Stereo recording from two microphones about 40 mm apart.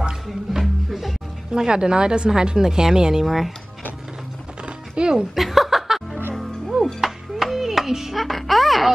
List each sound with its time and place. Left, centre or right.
0.5 s music: centre
1.5 s a woman's voice: centre
4.9 s speech: right
5.3 s chuckle: centre
7.0 s music: centre
8.2 s speech: centre